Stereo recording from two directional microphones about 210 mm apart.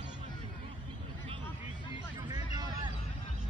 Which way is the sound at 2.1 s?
20° right (ahead or behind).